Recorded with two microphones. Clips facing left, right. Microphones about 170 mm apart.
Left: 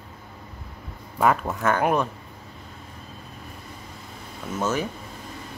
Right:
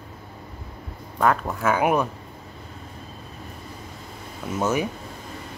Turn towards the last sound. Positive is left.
turn(degrees=-15)  # may be behind; listen again after turning